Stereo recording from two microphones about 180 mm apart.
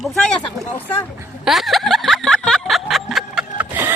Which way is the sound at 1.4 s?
Centre (ahead or behind).